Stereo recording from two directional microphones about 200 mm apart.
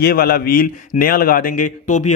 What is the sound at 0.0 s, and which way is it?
Speech, 50° left (ahead or behind).